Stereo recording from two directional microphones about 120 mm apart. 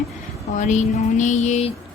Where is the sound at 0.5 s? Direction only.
90° left; by 1.7 s 65° left (ahead or behind).